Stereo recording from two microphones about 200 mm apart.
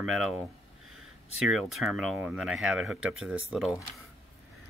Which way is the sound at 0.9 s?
90° right.